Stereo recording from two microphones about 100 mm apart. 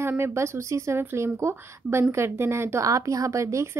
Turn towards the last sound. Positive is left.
turn(degrees=-30)  # may be behind; listen again after turning